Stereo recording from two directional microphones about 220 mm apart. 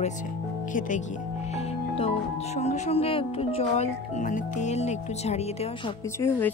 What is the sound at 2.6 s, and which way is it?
Speech, 30° left (ahead or behind).